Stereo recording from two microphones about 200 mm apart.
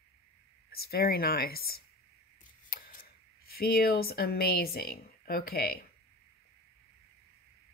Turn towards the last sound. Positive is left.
turn(degrees=50)  # may be behind; listen again after turning